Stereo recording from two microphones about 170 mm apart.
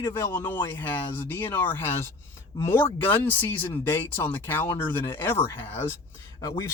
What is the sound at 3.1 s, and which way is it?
Speech, 10° left (ahead or behind).